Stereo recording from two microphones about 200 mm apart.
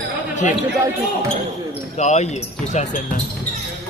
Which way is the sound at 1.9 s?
35° left (ahead or behind).